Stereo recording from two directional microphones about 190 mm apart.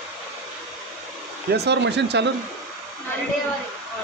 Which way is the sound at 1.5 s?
60° right (ahead or behind).